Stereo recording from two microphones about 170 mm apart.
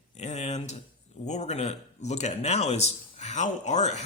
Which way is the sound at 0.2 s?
40° left (ahead or behind).